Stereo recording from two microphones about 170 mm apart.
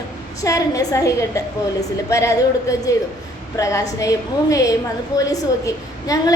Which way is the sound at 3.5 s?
20° left (ahead or behind).